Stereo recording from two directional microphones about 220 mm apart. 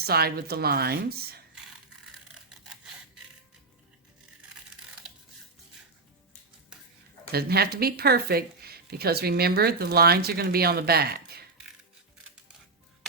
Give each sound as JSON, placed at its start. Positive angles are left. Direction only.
{"t": 0.0, "sound": "speech", "side_deg": -45}
{"t": 7.3, "sound": "speech", "side_deg": -45}